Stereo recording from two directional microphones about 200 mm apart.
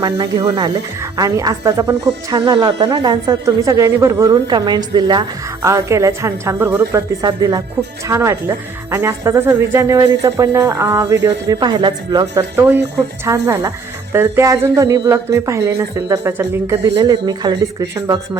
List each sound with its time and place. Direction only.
0.0 s speech: 15° right (ahead or behind)